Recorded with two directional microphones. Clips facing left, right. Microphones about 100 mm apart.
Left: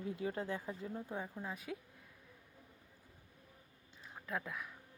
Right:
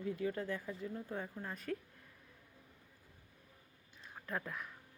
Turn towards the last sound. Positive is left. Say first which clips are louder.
# even
turn(degrees=0)  # may be behind; listen again after turning